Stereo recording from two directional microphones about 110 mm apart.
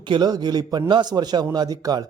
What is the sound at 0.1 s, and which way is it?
Speech, 40° right (ahead or behind).